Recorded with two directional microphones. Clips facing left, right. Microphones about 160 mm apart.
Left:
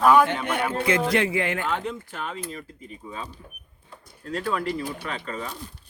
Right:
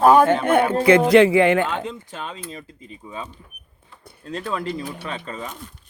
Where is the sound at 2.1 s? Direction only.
20° right (ahead or behind).